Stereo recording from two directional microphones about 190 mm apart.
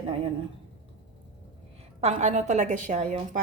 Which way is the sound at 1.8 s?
35° right (ahead or behind).